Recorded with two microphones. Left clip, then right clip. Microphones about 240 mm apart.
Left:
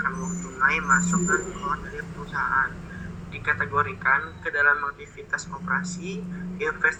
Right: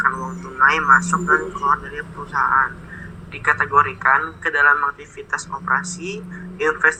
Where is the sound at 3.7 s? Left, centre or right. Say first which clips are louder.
Right 7 dB; right.